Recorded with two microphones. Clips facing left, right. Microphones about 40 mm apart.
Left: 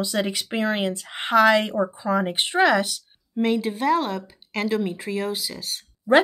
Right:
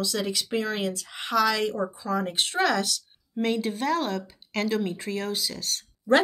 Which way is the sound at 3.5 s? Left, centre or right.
Centre.